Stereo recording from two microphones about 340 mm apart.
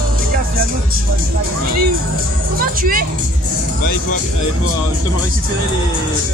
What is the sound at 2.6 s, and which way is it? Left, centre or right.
Speech, right.